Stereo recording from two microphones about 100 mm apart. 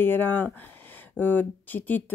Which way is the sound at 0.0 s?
20° left (ahead or behind).